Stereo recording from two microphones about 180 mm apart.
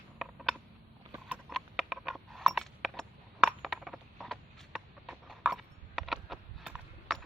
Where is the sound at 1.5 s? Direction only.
Centre (ahead or behind).